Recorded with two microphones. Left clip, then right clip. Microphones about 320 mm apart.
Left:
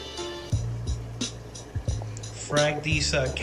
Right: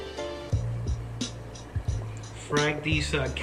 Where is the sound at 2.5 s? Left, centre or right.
Centre.